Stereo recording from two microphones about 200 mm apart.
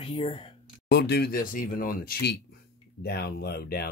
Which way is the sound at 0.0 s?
30° left (ahead or behind).